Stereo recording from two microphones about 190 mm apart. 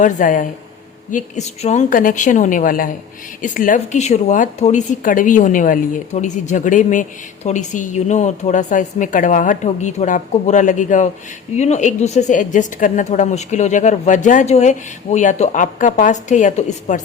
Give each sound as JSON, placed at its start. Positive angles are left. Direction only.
{"t": 0.0, "sound": "a woman's voice", "side_deg": 45}